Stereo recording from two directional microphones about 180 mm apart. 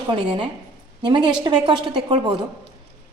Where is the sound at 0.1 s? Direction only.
25° right (ahead or behind).